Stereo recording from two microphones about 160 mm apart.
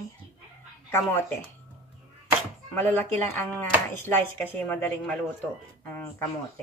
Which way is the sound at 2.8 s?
10° left (ahead or behind).